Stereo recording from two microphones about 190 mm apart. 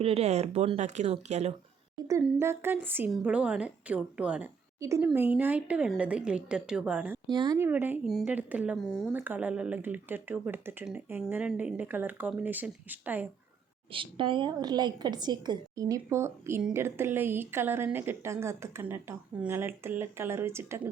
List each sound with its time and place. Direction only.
0.0 s speech: 35° right (ahead or behind)
2.2 s a woman's voice: 15° right (ahead or behind)
7.3 s a woman's voice: 20° right (ahead or behind)
13.9 s a woman's voice: 25° right (ahead or behind)